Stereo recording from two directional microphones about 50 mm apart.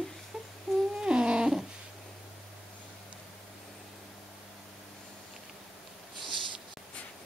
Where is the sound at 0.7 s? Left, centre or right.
Centre.